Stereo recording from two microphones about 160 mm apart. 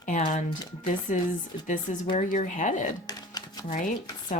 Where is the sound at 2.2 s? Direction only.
50° left (ahead or behind).